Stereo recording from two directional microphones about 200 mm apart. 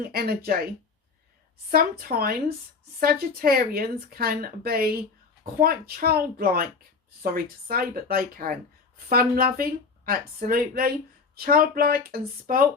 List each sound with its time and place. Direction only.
0.0 s speech: 50° right (ahead or behind)
1.7 s speech: 50° right (ahead or behind)